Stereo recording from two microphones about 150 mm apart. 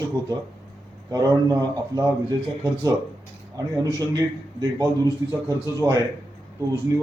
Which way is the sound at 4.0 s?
25° right (ahead or behind).